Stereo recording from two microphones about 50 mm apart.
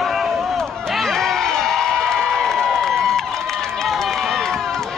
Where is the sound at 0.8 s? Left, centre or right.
Centre.